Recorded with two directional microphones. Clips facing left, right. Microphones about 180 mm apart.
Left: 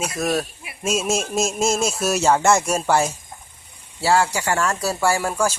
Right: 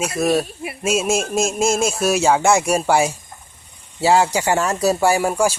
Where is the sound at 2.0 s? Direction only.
5° right (ahead or behind).